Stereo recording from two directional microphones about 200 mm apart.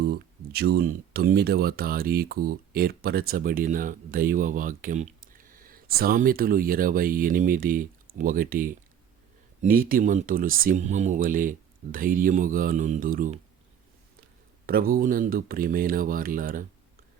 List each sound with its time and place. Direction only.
0.0 s speech: 50° right (ahead or behind)
14.7 s speech: 50° right (ahead or behind)